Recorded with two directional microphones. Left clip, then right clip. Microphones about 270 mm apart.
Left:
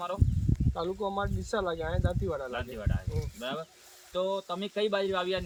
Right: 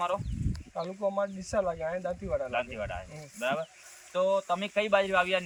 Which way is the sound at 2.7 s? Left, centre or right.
Centre.